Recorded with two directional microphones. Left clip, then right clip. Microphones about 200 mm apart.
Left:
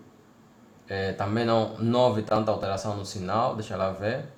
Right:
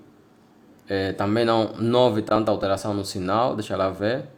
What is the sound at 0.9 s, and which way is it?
Speech, 50° right (ahead or behind).